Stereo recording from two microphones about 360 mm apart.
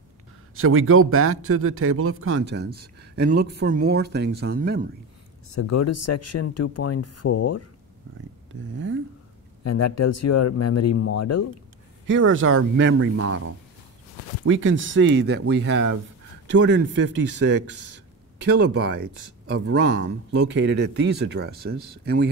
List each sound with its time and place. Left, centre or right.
0.6 s a man's voice: right
5.5 s speech: left
8.7 s speech: right
9.6 s speech: left
12.1 s a man's voice: right
18.7 s a man's voice: right
20.3 s a man's voice: right